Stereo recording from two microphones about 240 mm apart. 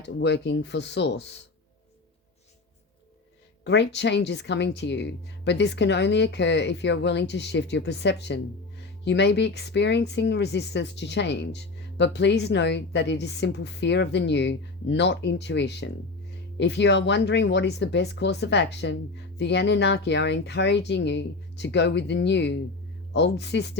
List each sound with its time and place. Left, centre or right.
0.0 s speech: left
3.6 s speech: left